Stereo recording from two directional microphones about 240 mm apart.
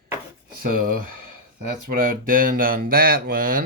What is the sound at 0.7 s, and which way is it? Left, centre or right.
Speech, right.